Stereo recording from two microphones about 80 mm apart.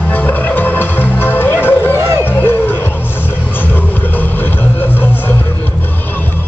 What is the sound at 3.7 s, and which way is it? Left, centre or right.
Music, left.